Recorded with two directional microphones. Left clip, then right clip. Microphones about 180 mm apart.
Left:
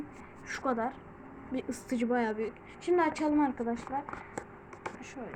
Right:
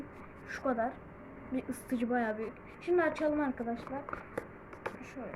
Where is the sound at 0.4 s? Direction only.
45° left (ahead or behind).